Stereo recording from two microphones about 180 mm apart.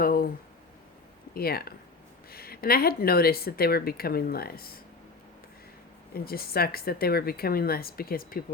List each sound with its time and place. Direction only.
0.0 s a sound: 55° left (ahead or behind)
1.3 s speech: 60° left (ahead or behind)
6.1 s speech: 55° left (ahead or behind)